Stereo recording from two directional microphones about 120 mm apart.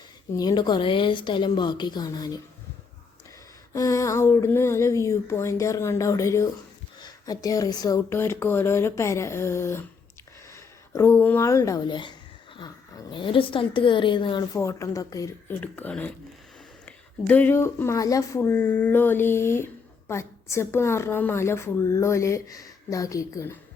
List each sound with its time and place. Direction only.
0.3 s a woman's voice: 35° left (ahead or behind)
3.7 s a woman's voice: 25° left (ahead or behind)
8.1 s a woman's voice: 20° left (ahead or behind)
11.9 s a woman's voice: 40° left (ahead or behind)
14.5 s a woman's voice: 25° left (ahead or behind)
15.4 s a woman's voice: 15° left (ahead or behind)